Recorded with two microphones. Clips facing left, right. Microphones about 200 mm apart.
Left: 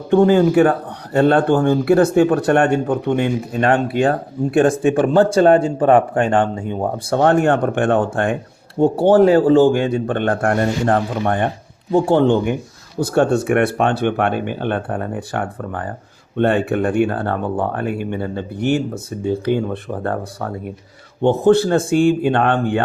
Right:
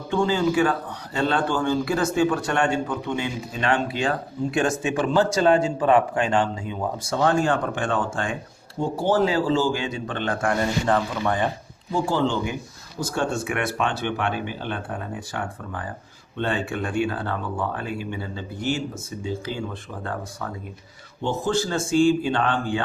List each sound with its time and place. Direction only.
0.1 s speech: 55° left (ahead or behind)
13.3 s speech: 40° left (ahead or behind)
13.6 s speech: 55° left (ahead or behind)